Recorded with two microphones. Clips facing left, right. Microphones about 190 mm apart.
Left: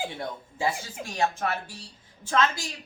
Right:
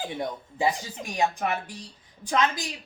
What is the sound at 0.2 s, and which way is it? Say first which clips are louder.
A woman's voice: right 3 dB; 15° right (ahead or behind).